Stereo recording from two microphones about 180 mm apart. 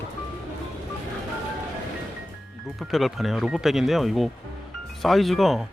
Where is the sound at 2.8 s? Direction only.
Centre (ahead or behind).